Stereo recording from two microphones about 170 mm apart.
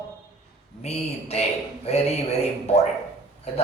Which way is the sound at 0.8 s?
40° left (ahead or behind).